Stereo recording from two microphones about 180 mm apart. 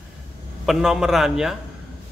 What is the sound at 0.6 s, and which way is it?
Speech, 5° right (ahead or behind).